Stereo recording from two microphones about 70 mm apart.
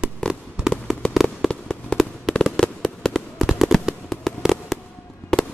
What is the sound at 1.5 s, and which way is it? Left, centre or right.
Fireworks, centre.